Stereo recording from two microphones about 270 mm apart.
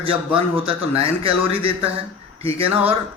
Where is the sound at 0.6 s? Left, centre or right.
Right.